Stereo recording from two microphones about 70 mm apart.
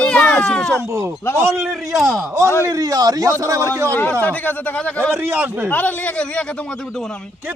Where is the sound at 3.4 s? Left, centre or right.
Right.